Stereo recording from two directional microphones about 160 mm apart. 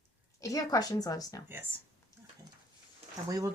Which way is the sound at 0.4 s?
20° left (ahead or behind).